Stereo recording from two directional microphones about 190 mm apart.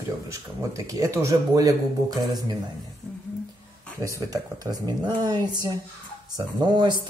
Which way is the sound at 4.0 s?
20° right (ahead or behind).